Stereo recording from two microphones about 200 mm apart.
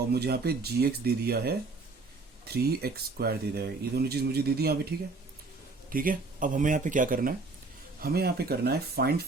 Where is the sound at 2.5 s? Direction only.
50° right (ahead or behind).